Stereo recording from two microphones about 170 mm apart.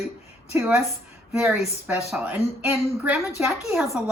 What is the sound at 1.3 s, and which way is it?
A woman's voice, 5° right (ahead or behind).